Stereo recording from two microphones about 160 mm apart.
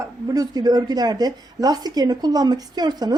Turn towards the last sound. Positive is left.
turn(degrees=-25)  # may be behind; listen again after turning